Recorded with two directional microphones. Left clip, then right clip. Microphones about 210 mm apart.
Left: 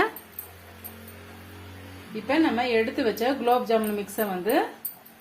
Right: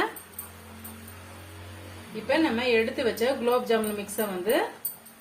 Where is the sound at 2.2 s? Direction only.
40° left (ahead or behind).